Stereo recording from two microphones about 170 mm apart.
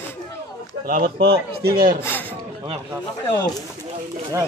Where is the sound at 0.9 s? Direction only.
60° right (ahead or behind).